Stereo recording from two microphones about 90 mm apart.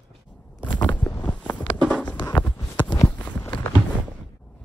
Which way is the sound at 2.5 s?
45° left (ahead or behind).